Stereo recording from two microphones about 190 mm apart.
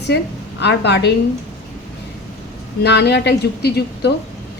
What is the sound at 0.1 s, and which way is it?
Speech, 60° left (ahead or behind).